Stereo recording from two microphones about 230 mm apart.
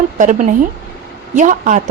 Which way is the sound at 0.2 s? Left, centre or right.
Right.